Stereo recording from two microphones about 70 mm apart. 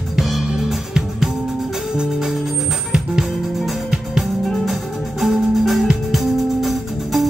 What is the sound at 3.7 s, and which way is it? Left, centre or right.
Music, centre.